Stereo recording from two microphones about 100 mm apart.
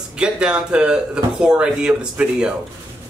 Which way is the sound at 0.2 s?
10° right (ahead or behind).